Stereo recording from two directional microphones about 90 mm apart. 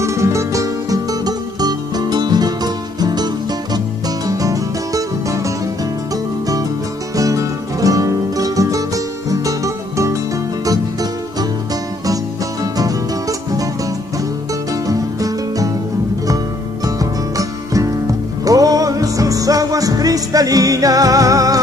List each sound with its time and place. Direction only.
0.0 s music: 35° right (ahead or behind)
4.3 s music: 40° right (ahead or behind)
7.2 s music: 40° right (ahead or behind)
14.7 s music: 40° right (ahead or behind)
16.8 s music: 40° right (ahead or behind)